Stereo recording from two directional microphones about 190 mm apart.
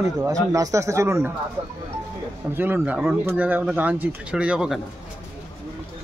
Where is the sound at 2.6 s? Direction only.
10° right (ahead or behind).